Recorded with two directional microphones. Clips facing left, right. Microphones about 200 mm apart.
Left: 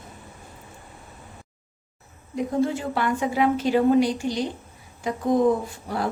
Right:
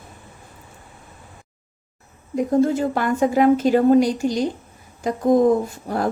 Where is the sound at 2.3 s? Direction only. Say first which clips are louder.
Right 6 dB; 45° right (ahead or behind).